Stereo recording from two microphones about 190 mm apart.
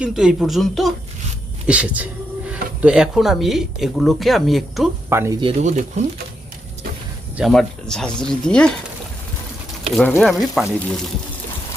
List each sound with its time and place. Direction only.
0.0 s a woman's voice: 5° right (ahead or behind)
5.0 s speech: 15° right (ahead or behind)
5.4 s speech: 35° right (ahead or behind)
7.3 s speech: centre (ahead or behind)
9.9 s speech: centre (ahead or behind)